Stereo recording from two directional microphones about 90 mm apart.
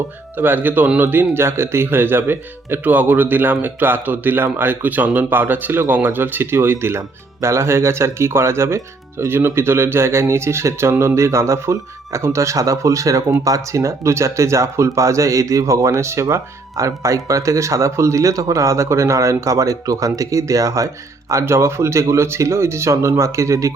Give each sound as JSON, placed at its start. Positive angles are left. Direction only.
{"t": 0.3, "sound": "speech", "side_deg": -20}